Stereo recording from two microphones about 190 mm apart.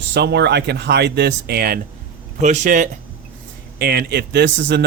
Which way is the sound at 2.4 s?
40° right (ahead or behind).